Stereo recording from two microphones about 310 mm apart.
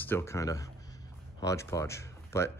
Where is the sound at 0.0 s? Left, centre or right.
Centre.